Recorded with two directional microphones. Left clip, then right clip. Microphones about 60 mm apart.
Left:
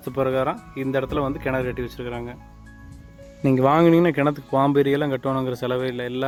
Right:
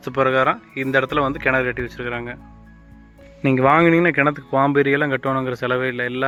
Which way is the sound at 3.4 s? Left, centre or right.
Centre.